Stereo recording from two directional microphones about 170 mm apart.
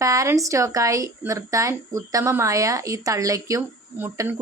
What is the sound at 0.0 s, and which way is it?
A woman's voice, 20° right (ahead or behind).